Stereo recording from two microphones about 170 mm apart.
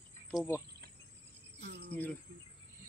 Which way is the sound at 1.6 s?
80° right.